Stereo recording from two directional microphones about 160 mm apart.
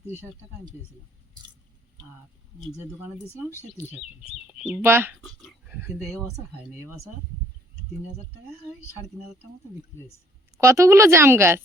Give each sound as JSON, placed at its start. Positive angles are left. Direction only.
{"t": 4.5, "sound": "speech", "side_deg": -10}
{"t": 5.2, "sound": "dog", "side_deg": -5}
{"t": 10.6, "sound": "a woman's voice", "side_deg": -15}